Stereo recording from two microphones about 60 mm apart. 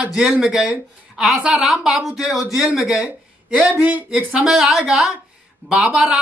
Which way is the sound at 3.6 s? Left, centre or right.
Right.